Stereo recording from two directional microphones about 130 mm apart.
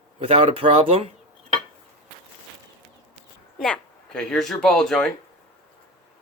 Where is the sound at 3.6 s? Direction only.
5° left (ahead or behind).